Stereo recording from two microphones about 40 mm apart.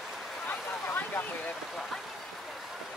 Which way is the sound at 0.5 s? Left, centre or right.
Left.